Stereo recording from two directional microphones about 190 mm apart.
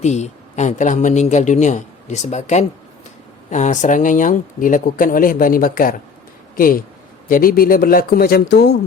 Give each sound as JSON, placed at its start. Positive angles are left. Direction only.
{"t": 0.0, "sound": "speech", "side_deg": 35}